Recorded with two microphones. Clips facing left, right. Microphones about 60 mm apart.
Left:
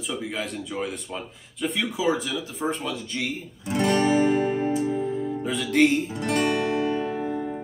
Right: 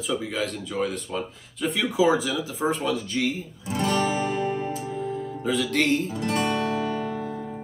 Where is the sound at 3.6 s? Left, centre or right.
Left.